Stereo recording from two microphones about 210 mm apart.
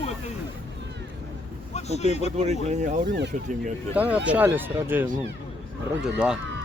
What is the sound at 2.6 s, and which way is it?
Speech, 35° right (ahead or behind).